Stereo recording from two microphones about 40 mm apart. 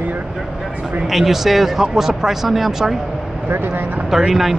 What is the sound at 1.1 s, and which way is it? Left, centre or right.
Speech, centre.